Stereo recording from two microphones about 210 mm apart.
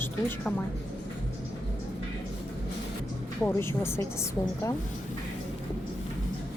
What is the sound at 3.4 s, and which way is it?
Speech, 10° left (ahead or behind).